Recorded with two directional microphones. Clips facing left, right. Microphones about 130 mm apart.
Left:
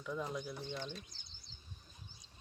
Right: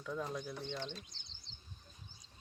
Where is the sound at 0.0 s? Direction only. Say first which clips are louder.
Even; 5° left (ahead or behind).